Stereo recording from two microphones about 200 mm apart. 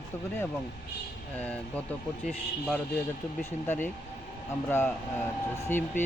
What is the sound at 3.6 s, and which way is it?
Speech, 10° left (ahead or behind).